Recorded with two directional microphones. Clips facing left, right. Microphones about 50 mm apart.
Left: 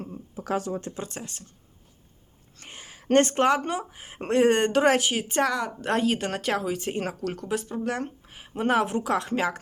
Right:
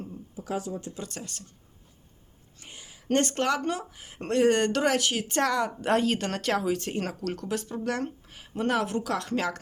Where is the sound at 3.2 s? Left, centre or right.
Left.